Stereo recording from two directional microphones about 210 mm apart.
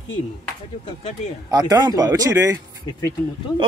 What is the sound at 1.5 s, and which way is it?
Speech, 20° right (ahead or behind).